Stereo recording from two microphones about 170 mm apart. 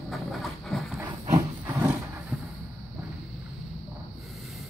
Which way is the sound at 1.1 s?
25° right (ahead or behind).